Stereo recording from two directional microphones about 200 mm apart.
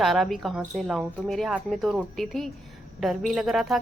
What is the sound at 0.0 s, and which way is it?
A woman's voice, centre (ahead or behind).